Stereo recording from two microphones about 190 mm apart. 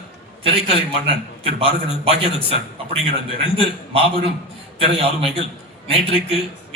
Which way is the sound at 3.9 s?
30° right (ahead or behind).